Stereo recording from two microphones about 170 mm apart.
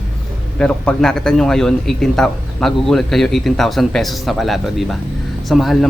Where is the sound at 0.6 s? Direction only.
5° left (ahead or behind).